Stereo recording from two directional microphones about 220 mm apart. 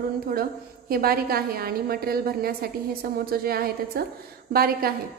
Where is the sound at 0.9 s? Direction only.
45° right (ahead or behind).